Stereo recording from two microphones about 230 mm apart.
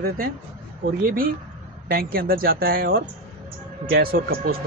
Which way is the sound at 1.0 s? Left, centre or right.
Right.